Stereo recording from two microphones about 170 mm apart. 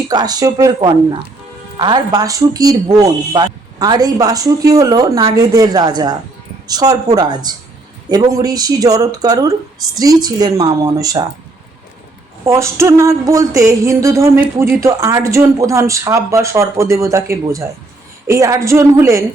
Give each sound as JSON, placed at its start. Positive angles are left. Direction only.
{"t": 0.1, "sound": "speech", "side_deg": -25}
{"t": 12.5, "sound": "speech", "side_deg": -15}